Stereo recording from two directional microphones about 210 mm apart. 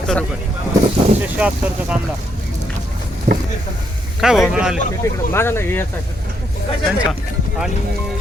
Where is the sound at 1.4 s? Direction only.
5° right (ahead or behind).